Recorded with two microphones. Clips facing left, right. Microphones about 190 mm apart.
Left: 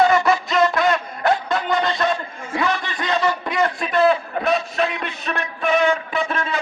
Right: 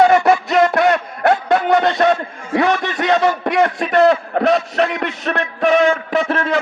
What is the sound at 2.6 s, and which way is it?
A man's voice, 65° right (ahead or behind).